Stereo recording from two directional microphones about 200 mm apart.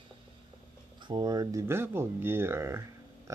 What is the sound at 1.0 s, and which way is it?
Speech, 25° right (ahead or behind).